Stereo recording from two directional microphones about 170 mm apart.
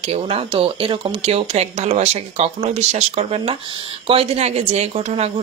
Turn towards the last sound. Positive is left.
turn(degrees=-40)  # may be behind; listen again after turning